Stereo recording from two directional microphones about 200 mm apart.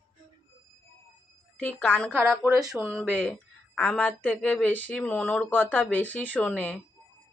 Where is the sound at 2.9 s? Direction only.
5° left (ahead or behind).